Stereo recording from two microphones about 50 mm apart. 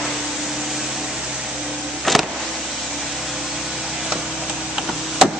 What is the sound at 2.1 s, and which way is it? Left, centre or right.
Vehicle, centre.